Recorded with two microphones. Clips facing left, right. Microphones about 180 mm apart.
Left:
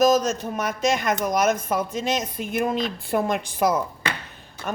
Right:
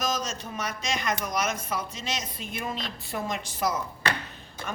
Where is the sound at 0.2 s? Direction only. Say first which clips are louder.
Left 8 dB; 55° left (ahead or behind).